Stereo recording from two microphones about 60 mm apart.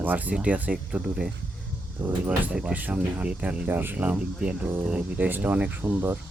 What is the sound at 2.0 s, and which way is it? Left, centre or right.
Speech, right.